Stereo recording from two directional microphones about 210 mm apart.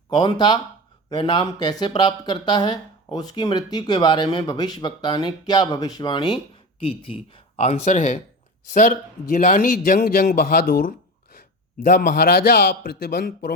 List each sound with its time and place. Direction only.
0.1 s a man's voice: 20° left (ahead or behind); by 13.5 s 45° left (ahead or behind)